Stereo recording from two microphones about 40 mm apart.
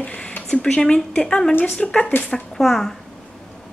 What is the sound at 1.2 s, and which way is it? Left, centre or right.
Speech, centre.